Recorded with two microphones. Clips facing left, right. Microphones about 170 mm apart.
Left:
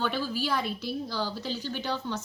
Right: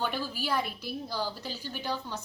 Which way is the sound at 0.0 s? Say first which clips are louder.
Left 3 dB; 10° right (ahead or behind).